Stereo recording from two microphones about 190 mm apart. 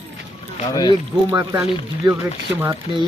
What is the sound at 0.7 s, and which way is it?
Speech, 20° left (ahead or behind).